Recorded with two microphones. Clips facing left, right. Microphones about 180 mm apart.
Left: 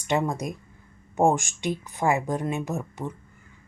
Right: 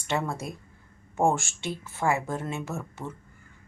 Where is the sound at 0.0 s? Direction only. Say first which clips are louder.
Left 4 dB; 15° left (ahead or behind).